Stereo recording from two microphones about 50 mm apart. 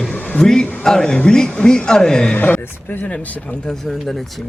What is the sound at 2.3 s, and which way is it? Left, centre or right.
Speech, left.